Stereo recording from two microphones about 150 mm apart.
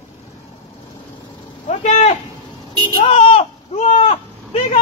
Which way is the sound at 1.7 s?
50° left (ahead or behind).